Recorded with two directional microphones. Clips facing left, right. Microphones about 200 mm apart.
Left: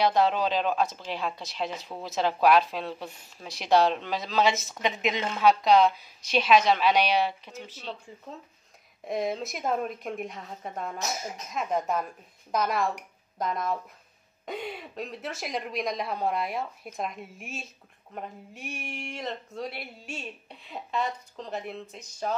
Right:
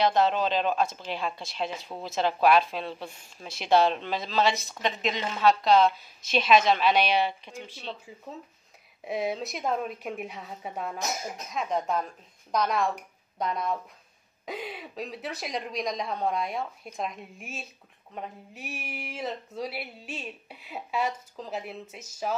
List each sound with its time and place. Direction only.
0.0 s a woman's voice: 10° left (ahead or behind)
1.6 s a woman's voice: 10° right (ahead or behind)
8.1 s speech: 5° right (ahead or behind)